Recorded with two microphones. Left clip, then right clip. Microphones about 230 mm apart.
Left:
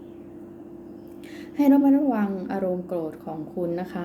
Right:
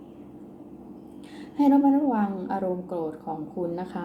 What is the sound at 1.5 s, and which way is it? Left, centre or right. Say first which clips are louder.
A woman's voice: left 1 dB; left.